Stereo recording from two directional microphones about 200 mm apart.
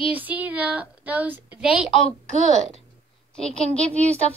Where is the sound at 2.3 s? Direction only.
35° right (ahead or behind).